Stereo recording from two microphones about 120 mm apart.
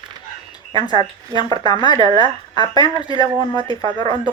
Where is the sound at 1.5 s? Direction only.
35° left (ahead or behind).